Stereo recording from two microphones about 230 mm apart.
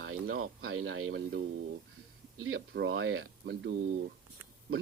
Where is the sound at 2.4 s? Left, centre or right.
Right.